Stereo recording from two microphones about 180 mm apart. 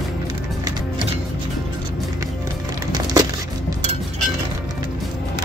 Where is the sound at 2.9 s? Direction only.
20° right (ahead or behind).